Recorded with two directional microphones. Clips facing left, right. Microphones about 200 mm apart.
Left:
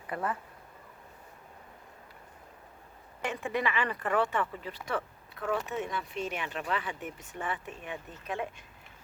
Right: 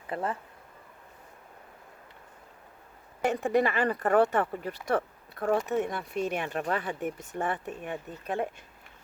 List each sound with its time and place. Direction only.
0.1 s speech: 25° right (ahead or behind)
3.2 s speech: 40° right (ahead or behind)